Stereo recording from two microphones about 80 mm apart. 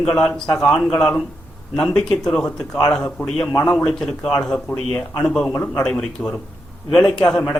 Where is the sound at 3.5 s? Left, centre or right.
Left.